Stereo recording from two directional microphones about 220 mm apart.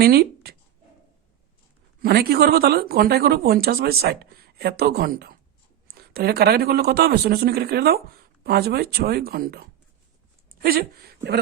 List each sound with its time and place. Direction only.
0.0 s speech: 45° right (ahead or behind)
2.0 s speech: 45° right (ahead or behind)